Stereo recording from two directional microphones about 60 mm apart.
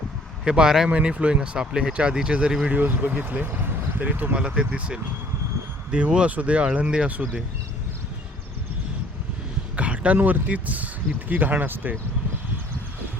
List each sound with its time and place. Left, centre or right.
0.4 s speech: centre
0.9 s speech: right
2.6 s speech: right
4.4 s speech: centre
9.7 s speech: right